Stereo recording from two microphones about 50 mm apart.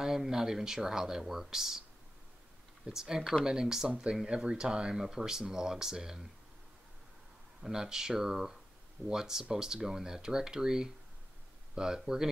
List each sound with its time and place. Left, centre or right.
0.0 s speech: centre
2.9 s speech: centre
7.6 s speech: centre